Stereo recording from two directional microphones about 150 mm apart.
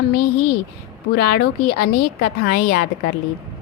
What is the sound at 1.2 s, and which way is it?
A woman's voice, 90° left.